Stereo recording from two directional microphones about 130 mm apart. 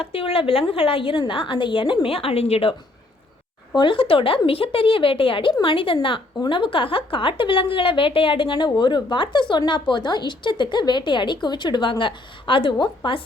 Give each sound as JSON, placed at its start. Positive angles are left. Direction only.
{"t": 0.0, "sound": "a woman's voice", "side_deg": 45}
{"t": 3.8, "sound": "a woman's voice", "side_deg": 40}